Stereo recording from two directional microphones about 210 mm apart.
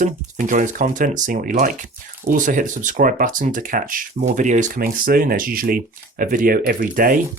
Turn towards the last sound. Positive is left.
turn(degrees=-40)  # may be behind; listen again after turning